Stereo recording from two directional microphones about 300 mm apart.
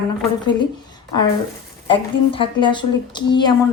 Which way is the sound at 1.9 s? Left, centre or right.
Centre.